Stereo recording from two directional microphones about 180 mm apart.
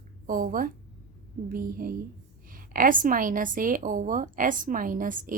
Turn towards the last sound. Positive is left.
turn(degrees=-50)  # may be behind; listen again after turning